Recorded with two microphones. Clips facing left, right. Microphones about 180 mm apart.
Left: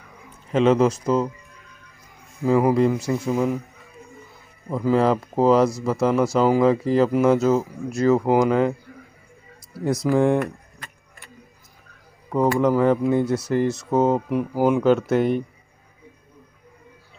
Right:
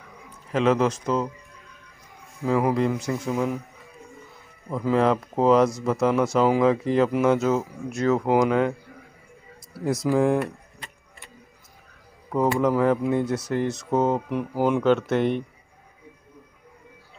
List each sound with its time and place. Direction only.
0.5 s speech: centre (ahead or behind)
2.4 s speech: 5° left (ahead or behind)
4.6 s speech: 5° left (ahead or behind)
9.8 s speech: centre (ahead or behind)
10.4 s a sound: 25° right (ahead or behind)
12.5 s speech: centre (ahead or behind)